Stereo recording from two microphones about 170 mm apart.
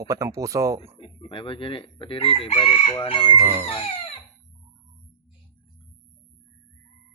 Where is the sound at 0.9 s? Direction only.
30° left (ahead or behind).